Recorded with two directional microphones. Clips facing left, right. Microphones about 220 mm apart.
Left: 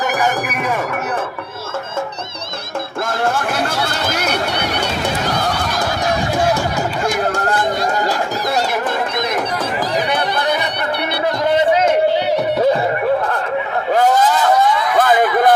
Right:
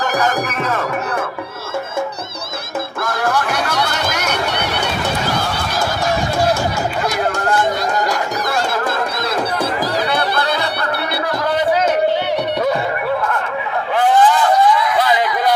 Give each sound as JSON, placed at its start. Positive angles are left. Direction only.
{"t": 3.3, "sound": "music", "side_deg": 30}
{"t": 10.1, "sound": "music", "side_deg": 15}
{"t": 13.9, "sound": "a sound", "side_deg": 40}